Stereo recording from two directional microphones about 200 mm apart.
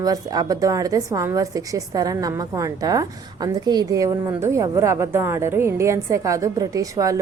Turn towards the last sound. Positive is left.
turn(degrees=-15)  # may be behind; listen again after turning